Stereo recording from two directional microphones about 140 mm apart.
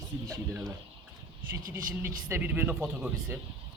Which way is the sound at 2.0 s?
15° right (ahead or behind).